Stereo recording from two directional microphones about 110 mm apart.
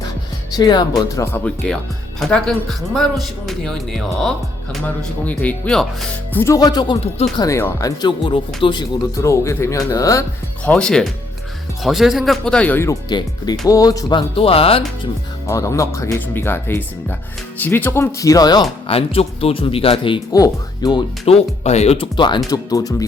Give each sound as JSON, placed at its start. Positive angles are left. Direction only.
{"t": 0.5, "sound": "speech", "side_deg": 40}
{"t": 1.3, "sound": "speech", "side_deg": 10}
{"t": 6.3, "sound": "speech", "side_deg": 25}
{"t": 6.6, "sound": "speech", "side_deg": 40}
{"t": 8.2, "sound": "speech", "side_deg": 50}
{"t": 9.2, "sound": "speech", "side_deg": 25}
{"t": 10.6, "sound": "speech", "side_deg": 10}
{"t": 13.1, "sound": "speech", "side_deg": 40}
{"t": 15.4, "sound": "speech", "side_deg": 30}
{"t": 18.9, "sound": "speech", "side_deg": 60}
{"t": 20.3, "sound": "speech", "side_deg": 35}
{"t": 21.2, "sound": "speech", "side_deg": 75}
{"t": 21.9, "sound": "speech", "side_deg": 50}
{"t": 22.4, "sound": "speech", "side_deg": 35}